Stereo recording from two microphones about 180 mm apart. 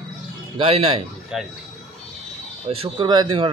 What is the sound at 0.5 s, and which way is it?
Speech, 30° right (ahead or behind).